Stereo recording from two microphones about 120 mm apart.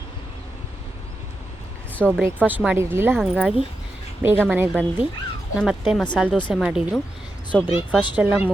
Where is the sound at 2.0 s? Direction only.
Centre (ahead or behind).